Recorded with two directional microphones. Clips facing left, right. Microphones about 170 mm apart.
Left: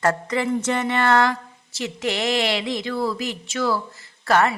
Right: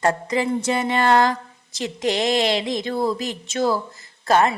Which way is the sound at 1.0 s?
15° right (ahead or behind).